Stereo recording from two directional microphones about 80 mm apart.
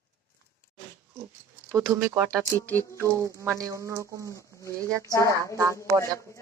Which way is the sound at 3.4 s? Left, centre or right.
Right.